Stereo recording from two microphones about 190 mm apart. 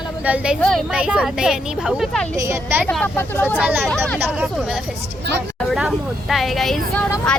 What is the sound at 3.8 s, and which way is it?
Speech, 5° left (ahead or behind).